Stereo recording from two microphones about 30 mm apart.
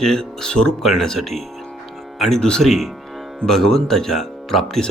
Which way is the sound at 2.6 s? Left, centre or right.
Centre.